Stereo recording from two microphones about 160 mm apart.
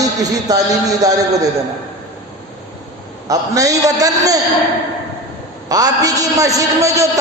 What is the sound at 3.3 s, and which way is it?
A man's voice, 20° right (ahead or behind).